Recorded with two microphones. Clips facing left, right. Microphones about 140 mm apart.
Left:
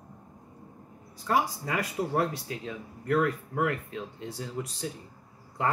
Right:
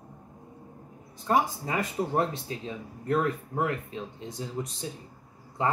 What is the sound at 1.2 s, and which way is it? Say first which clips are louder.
Speech: right 2 dB; 25° right (ahead or behind).